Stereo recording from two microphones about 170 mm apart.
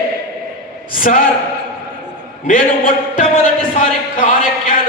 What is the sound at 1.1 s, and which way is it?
Speech, 50° left (ahead or behind).